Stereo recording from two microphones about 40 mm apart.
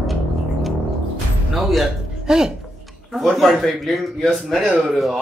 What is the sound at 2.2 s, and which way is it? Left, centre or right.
Speech, centre.